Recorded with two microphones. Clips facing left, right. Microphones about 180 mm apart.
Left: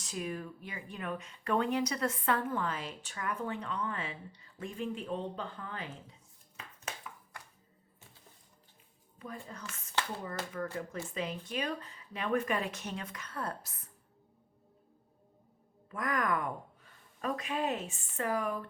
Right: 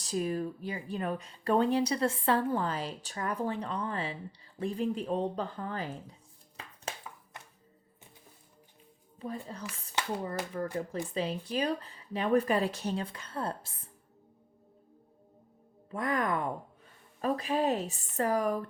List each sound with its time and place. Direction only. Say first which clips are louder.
0.0 s speech: right 7 dB; 35° right (ahead or behind)
6.9 s a sound: right 3 dB; 30° right (ahead or behind)
7.3 s music: right 1 dB; 20° right (ahead or behind)
9.1 s speech: right 6 dB; 30° right (ahead or behind)
15.9 s speech: right 2 dB; 30° right (ahead or behind)